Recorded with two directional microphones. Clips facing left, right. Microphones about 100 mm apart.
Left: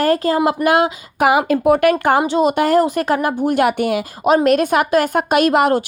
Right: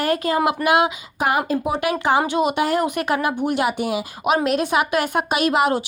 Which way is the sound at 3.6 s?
55° left (ahead or behind).